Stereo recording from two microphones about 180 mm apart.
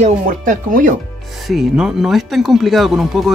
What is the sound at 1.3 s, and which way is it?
Speech, centre (ahead or behind).